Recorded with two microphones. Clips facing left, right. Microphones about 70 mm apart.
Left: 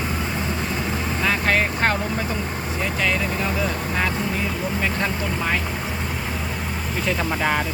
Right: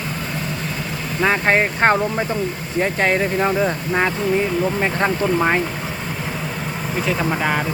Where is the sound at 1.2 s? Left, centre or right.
Right.